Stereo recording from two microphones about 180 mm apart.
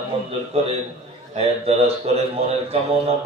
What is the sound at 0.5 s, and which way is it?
A man's voice, 35° right (ahead or behind).